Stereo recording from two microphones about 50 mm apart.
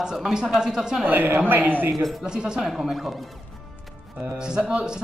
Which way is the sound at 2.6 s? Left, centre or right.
Centre.